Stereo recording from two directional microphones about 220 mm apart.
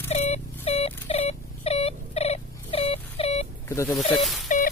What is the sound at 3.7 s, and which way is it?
Snake, 10° left (ahead or behind).